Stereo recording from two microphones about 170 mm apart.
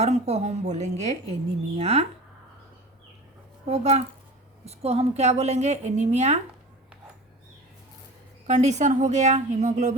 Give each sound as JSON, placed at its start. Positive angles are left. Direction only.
{"t": 0.0, "sound": "a woman's voice", "side_deg": -40}
{"t": 3.7, "sound": "a woman's voice", "side_deg": -40}
{"t": 8.4, "sound": "a woman's voice", "side_deg": -45}